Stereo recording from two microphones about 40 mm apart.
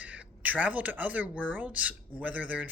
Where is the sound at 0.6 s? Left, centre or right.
Right.